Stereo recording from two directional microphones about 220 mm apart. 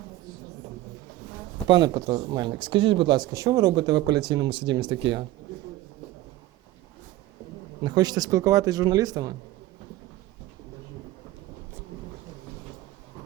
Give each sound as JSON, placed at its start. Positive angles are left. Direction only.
{"t": 1.6, "sound": "speech", "side_deg": -20}
{"t": 7.9, "sound": "speech", "side_deg": -20}